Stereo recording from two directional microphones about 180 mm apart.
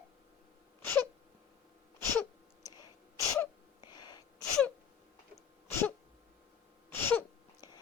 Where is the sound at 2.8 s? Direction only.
20° left (ahead or behind).